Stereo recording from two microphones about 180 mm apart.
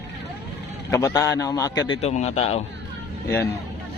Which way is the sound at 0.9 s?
20° left (ahead or behind).